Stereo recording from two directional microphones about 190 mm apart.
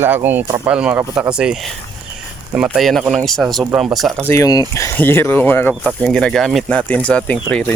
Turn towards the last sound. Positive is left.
turn(degrees=10)  # may be behind; listen again after turning